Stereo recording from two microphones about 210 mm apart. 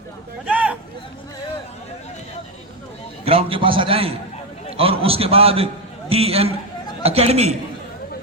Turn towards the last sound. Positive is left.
turn(degrees=-30)  # may be behind; listen again after turning